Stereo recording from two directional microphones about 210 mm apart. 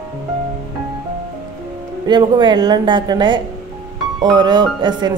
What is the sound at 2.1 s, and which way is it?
Speech, 20° right (ahead or behind).